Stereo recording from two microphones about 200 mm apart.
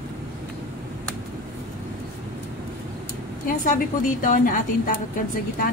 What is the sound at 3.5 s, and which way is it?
A woman's voice, 40° left (ahead or behind).